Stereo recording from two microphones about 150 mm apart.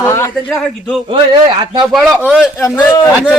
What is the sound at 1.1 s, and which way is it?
Speech, 30° right (ahead or behind).